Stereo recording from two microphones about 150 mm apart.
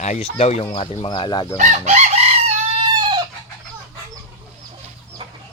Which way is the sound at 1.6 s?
55° right (ahead or behind).